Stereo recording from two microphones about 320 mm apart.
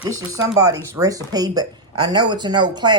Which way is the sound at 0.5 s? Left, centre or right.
Centre.